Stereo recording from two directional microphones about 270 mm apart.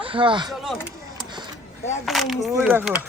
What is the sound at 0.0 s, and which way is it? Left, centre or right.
Speech, centre.